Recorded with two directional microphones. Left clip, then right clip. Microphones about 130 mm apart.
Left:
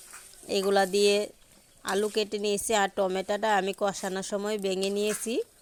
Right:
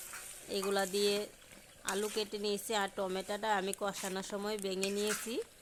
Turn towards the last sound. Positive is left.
turn(degrees=45)  # may be behind; listen again after turning